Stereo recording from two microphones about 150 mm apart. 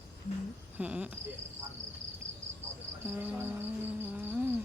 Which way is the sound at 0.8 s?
5° right (ahead or behind).